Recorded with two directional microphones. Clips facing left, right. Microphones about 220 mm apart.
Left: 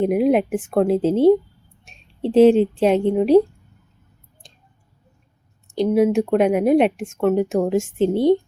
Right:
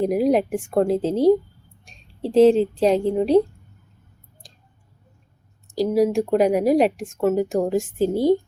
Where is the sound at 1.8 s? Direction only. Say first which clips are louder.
Left 4 dB; 5° left (ahead or behind).